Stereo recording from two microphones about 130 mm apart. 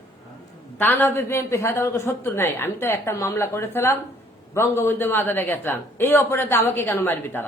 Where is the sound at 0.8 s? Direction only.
15° left (ahead or behind).